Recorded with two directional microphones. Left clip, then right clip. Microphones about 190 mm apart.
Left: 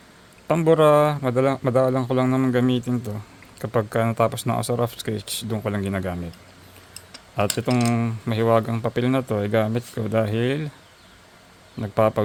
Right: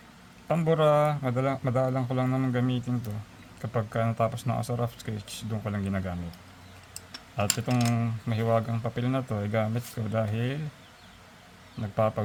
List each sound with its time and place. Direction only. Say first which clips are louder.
0.4 s speech: left 7 dB; 45° left (ahead or behind)
7.3 s speech: left 6 dB; 50° left (ahead or behind)
11.8 s speech: left 7 dB; 50° left (ahead or behind)